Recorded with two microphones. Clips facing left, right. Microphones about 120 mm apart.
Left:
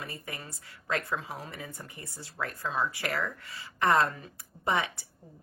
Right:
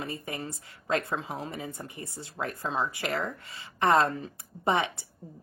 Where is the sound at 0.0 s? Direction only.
25° right (ahead or behind).